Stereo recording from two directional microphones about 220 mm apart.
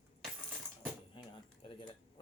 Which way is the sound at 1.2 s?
20° left (ahead or behind).